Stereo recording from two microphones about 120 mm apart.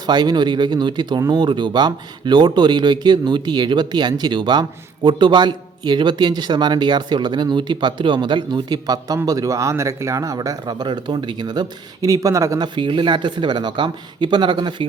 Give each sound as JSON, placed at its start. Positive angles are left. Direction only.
{"t": 0.0, "sound": "a man's voice", "side_deg": -35}